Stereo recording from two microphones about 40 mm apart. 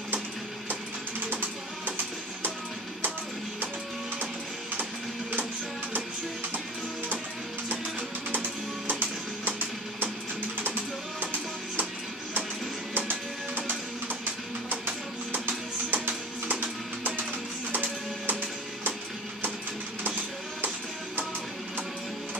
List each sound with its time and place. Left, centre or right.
8.3 s music: right
10.6 s music: right
12.9 s music: right